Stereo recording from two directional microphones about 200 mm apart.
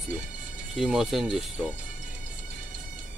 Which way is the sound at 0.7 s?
Centre (ahead or behind).